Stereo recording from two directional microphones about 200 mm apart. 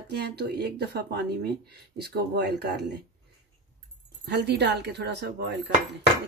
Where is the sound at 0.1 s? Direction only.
55° right (ahead or behind).